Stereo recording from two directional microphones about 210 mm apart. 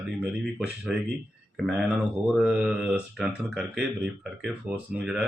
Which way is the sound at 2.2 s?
5° right (ahead or behind).